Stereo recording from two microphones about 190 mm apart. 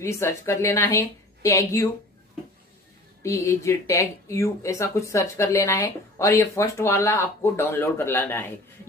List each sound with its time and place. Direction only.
0.0 s speech: 15° left (ahead or behind)
3.2 s speech: 15° left (ahead or behind)